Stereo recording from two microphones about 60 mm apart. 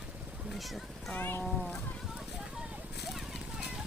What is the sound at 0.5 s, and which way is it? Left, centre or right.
Speech, centre.